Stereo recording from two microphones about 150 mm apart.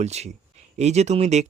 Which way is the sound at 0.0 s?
45° right (ahead or behind).